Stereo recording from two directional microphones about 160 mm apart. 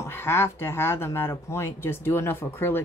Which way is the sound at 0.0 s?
15° left (ahead or behind).